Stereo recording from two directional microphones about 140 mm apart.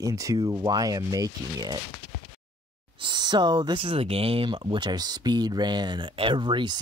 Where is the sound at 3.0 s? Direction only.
35° right (ahead or behind).